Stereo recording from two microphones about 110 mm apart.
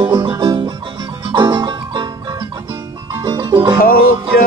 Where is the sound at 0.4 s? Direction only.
40° right (ahead or behind).